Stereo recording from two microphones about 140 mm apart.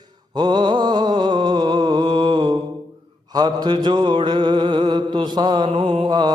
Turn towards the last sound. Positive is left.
turn(degrees=-30)  # may be behind; listen again after turning